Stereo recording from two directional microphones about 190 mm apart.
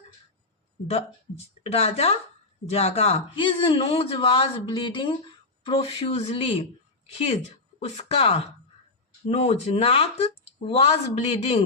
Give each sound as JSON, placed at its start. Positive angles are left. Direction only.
{"t": 1.6, "sound": "a man's voice", "side_deg": 35}
{"t": 7.8, "sound": "speech", "side_deg": 35}